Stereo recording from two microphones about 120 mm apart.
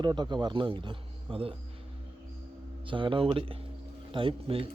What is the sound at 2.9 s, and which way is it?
Speech, 45° right (ahead or behind).